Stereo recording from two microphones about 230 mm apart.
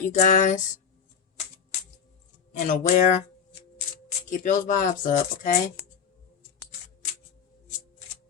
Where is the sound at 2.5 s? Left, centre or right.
Left.